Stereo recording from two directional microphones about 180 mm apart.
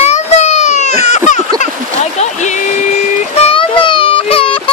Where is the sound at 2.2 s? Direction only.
40° left (ahead or behind).